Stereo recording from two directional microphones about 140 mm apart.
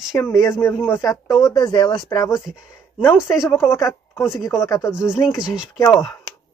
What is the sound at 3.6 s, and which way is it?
Speech, 20° left (ahead or behind).